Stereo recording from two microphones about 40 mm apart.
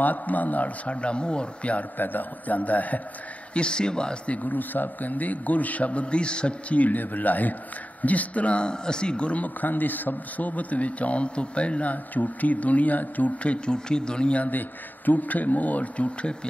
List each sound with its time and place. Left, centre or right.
0.0 s a man's voice: left
0.8 s a man's voice: left
2.0 s a man's voice: left
3.5 s a man's voice: left
4.3 s a man's voice: left
6.8 s a man's voice: left
9.6 s a man's voice: left
13.7 s a man's voice: left
14.3 s a man's voice: left